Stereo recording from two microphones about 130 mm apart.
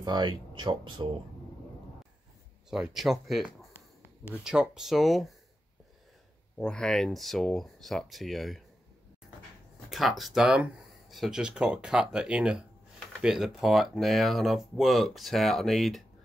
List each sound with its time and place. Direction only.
0.0 s speech: 35° right (ahead or behind)
2.7 s speech: 5° right (ahead or behind)
6.6 s speech: 5° left (ahead or behind)
9.8 s speech: centre (ahead or behind)